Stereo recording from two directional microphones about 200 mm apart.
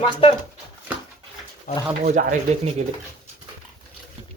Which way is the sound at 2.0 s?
40° right (ahead or behind).